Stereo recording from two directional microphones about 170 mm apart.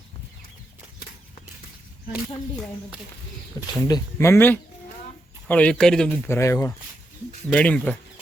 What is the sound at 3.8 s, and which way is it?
Speech, 20° left (ahead or behind).